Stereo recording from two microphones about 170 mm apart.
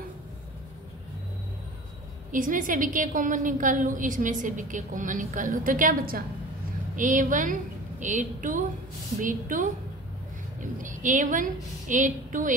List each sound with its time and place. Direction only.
2.3 s a woman's voice: 50° right (ahead or behind)
10.8 s a woman's voice: 50° right (ahead or behind)